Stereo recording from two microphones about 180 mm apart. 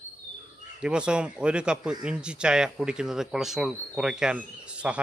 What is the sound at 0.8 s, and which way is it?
Speech, 5° right (ahead or behind).